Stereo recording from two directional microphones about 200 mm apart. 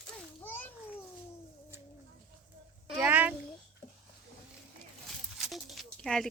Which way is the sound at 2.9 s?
10° right (ahead or behind).